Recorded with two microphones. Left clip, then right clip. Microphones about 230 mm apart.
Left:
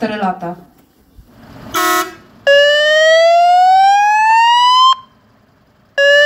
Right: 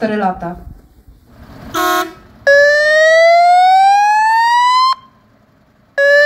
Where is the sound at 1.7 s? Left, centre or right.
Centre.